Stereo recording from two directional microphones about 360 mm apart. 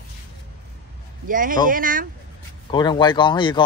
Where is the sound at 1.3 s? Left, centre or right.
Right.